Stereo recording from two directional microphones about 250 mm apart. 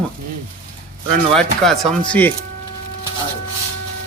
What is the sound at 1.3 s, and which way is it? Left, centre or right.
A man's voice, centre.